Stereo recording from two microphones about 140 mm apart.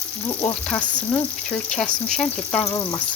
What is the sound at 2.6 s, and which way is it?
Speech, 20° left (ahead or behind).